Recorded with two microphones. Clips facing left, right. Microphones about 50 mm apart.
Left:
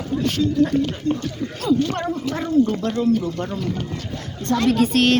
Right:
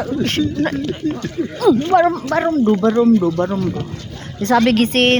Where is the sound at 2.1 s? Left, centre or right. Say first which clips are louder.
Right 7 dB; right.